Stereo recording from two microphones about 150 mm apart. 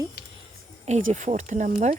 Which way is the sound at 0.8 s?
50° right (ahead or behind).